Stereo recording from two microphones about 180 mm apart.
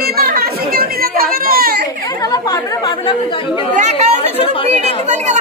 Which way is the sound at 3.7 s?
35° right (ahead or behind).